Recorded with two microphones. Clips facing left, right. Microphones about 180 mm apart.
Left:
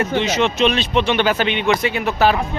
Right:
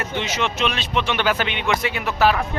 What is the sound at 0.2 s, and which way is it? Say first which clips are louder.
Speech: left 5 dB; 25° left (ahead or behind).